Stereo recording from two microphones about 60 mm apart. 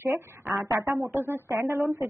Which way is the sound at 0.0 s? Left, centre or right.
Right.